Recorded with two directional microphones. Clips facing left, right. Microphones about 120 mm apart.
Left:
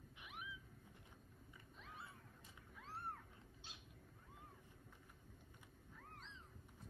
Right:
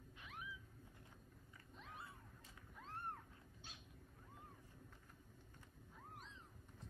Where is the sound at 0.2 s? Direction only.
15° left (ahead or behind).